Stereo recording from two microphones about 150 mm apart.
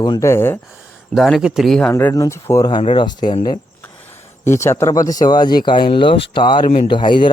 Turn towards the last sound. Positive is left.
turn(degrees=30)  # may be behind; listen again after turning